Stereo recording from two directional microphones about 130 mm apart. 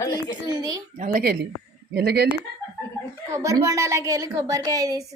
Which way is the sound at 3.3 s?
25° right (ahead or behind).